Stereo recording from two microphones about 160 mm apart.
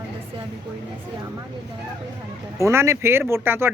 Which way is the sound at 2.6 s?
15° right (ahead or behind).